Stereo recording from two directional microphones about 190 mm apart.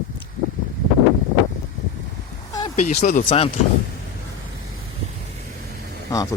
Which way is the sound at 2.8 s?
40° left (ahead or behind).